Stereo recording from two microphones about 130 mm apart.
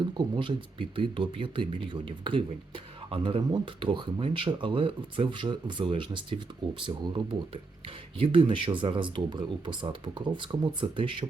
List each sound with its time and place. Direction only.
0.1 s speech: 40° right (ahead or behind)